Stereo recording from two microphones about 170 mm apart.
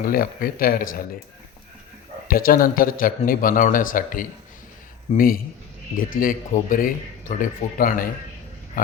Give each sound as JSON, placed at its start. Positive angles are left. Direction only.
{"t": 0.1, "sound": "speech", "side_deg": 55}
{"t": 2.3, "sound": "speech", "side_deg": 55}